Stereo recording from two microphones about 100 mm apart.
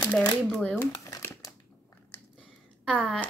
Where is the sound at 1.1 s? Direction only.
30° left (ahead or behind).